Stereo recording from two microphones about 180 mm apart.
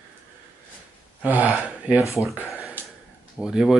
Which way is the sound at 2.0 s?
15° left (ahead or behind).